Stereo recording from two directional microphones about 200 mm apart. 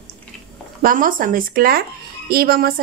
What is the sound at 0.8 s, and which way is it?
Speech, 45° right (ahead or behind).